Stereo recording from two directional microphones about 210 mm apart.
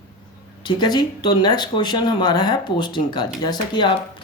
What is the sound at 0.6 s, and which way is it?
Speech, 20° left (ahead or behind).